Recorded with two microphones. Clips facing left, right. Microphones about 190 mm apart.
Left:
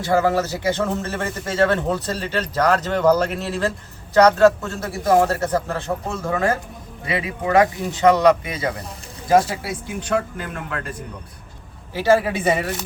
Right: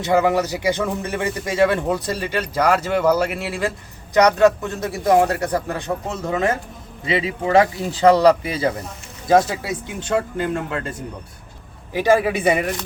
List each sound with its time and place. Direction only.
0.0 s a man's voice: 20° right (ahead or behind)
11.9 s a man's voice: 15° right (ahead or behind)